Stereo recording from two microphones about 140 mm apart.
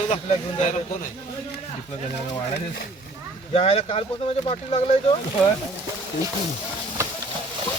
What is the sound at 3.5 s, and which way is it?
Speech, 45° left (ahead or behind).